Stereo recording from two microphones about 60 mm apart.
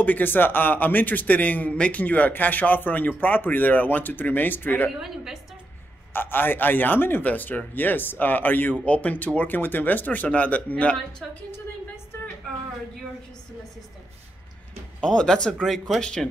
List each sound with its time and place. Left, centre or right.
0.0 s a man's voice: left
5.0 s a woman's voice: centre
6.1 s a man's voice: left
15.0 s speech: centre